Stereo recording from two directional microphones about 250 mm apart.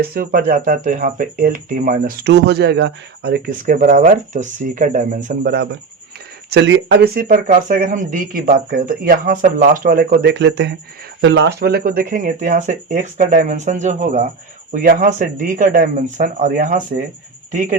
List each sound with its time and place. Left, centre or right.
0.0 s speech: right